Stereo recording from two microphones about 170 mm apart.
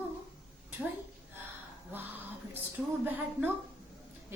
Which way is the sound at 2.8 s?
5° right (ahead or behind).